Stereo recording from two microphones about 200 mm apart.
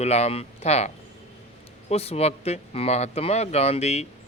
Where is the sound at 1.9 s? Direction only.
30° left (ahead or behind).